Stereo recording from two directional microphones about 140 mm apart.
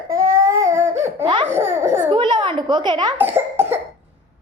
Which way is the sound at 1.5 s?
15° right (ahead or behind).